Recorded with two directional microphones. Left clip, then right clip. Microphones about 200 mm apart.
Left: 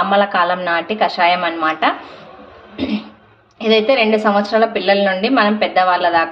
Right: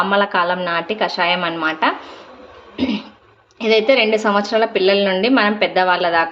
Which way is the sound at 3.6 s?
20° right (ahead or behind).